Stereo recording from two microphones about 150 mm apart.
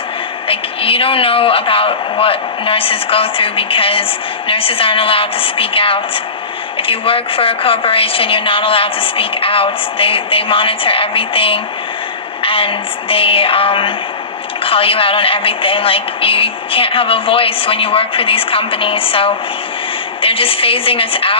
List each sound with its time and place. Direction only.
0.4 s a woman's voice: 40° left (ahead or behind)